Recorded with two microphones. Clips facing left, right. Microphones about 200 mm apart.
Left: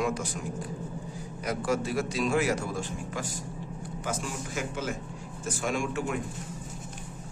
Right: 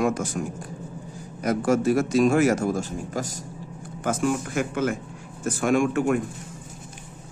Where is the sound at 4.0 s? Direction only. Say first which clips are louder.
Right 11 dB; 55° right (ahead or behind).